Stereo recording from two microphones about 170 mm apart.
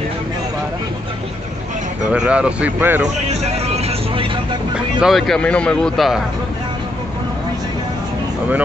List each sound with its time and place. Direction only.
2.1 s speech: 5° right (ahead or behind)
3.3 s vehicle: 40° right (ahead or behind)
5.0 s speech: centre (ahead or behind)